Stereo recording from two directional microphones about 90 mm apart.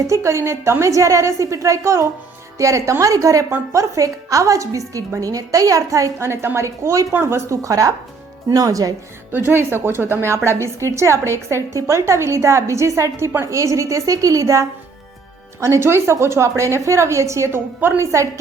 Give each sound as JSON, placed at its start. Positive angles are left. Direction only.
{"t": 0.1, "sound": "a woman's voice", "side_deg": -30}
{"t": 9.5, "sound": "a woman's voice", "side_deg": -25}